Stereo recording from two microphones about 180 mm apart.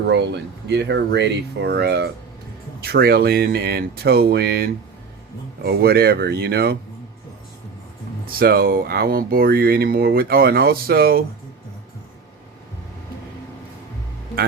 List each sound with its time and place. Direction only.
0.1 s speech: 70° right (ahead or behind)
8.4 s speech: 55° right (ahead or behind)